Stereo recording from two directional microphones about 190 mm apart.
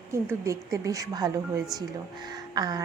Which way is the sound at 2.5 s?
20° right (ahead or behind).